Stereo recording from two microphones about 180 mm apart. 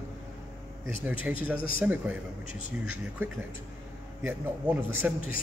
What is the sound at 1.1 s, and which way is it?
Speech, 10° right (ahead or behind).